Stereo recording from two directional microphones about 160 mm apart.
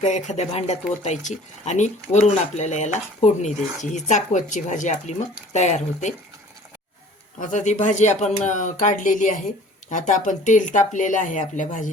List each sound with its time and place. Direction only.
0.0 s speech: 45° left (ahead or behind)
7.3 s speech: 50° left (ahead or behind)